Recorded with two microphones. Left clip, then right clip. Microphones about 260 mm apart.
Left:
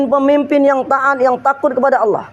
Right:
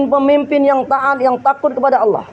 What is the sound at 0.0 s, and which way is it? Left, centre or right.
A man's voice, left.